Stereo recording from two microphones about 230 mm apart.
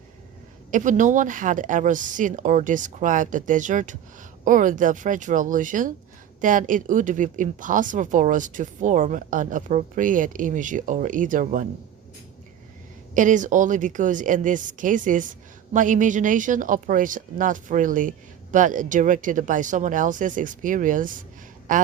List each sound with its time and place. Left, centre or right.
0.7 s a woman's voice: right
13.1 s a woman's voice: right